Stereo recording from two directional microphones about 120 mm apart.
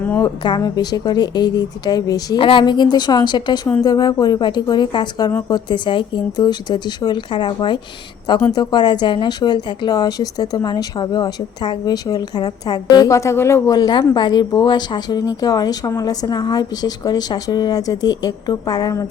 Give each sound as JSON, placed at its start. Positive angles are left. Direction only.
{"t": 0.2, "sound": "speech", "side_deg": 35}
{"t": 2.4, "sound": "speech", "side_deg": 45}
{"t": 13.7, "sound": "speech", "side_deg": 40}